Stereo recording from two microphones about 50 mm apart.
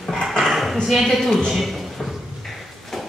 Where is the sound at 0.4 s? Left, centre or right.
Centre.